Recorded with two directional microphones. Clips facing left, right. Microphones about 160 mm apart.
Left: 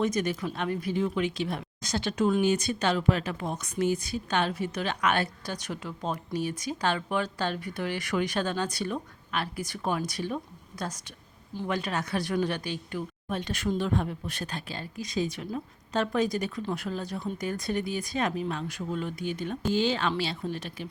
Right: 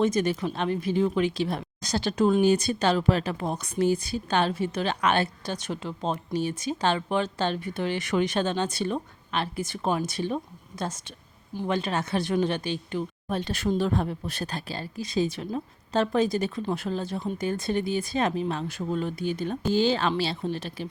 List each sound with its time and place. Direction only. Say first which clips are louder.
0.0 s speech: right 4 dB; 30° right (ahead or behind)